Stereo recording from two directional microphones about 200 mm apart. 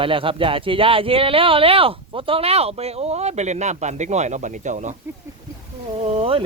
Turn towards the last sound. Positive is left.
turn(degrees=-30)  # may be behind; listen again after turning